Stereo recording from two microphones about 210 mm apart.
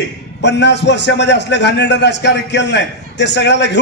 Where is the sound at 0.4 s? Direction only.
55° left (ahead or behind).